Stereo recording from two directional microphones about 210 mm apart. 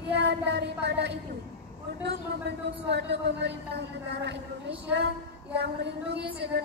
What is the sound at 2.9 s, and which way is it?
A woman's voice, 55° right (ahead or behind).